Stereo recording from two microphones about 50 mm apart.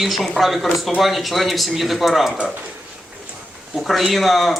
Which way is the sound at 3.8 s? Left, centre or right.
Centre.